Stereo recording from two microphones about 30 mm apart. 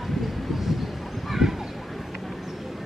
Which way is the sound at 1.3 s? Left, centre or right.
Centre.